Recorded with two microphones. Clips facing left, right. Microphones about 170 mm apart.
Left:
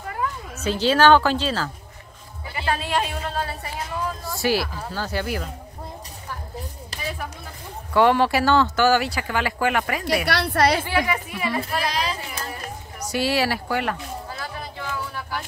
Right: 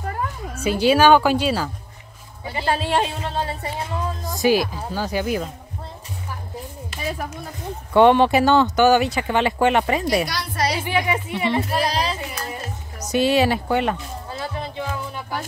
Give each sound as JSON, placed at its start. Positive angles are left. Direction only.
{"t": 0.6, "sound": "speech", "side_deg": -10}
{"t": 2.4, "sound": "speech", "side_deg": -30}
{"t": 7.9, "sound": "speech", "side_deg": -20}
{"t": 10.2, "sound": "a woman's voice", "side_deg": 65}
{"t": 10.8, "sound": "speech", "side_deg": -20}
{"t": 13.0, "sound": "a sound", "side_deg": -20}